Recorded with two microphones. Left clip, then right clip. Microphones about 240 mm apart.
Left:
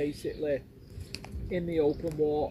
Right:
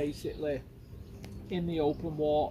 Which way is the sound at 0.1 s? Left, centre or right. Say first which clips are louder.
Left 2 dB; centre.